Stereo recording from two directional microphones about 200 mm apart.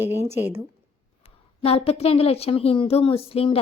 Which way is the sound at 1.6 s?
30° left (ahead or behind).